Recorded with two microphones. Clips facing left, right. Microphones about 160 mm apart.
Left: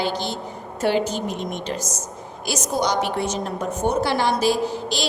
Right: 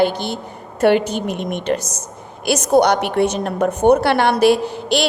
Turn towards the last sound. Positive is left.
turn(degrees=-65)  # may be behind; listen again after turning